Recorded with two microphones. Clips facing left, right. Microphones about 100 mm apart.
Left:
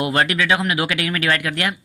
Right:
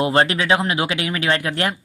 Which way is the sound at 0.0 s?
30° right (ahead or behind).